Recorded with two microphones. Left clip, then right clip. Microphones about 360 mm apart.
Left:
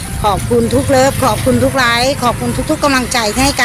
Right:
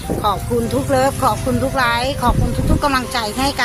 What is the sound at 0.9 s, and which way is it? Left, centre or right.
Speech, right.